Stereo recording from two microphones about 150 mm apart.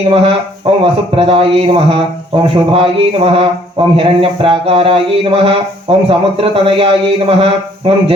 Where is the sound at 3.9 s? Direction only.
35° right (ahead or behind).